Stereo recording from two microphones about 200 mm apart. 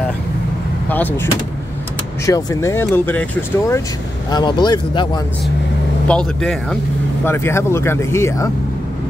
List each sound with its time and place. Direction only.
0.8 s speech: 10° left (ahead or behind)
4.3 s speech: 20° left (ahead or behind)
6.0 s speech: 5° left (ahead or behind)